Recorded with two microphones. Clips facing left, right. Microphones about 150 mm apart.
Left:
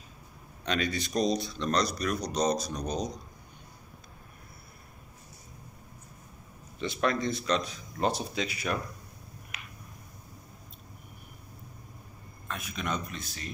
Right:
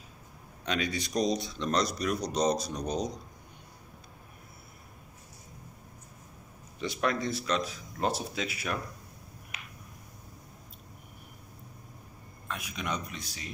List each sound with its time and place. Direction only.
0.7 s speech: 10° right (ahead or behind)
6.8 s speech: 10° right (ahead or behind)
12.4 s a man's voice: 15° right (ahead or behind)